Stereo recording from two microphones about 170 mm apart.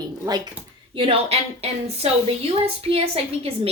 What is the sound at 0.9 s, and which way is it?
A woman's voice, 35° right (ahead or behind).